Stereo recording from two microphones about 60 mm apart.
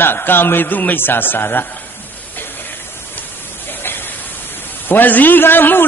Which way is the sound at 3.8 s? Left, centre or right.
Left.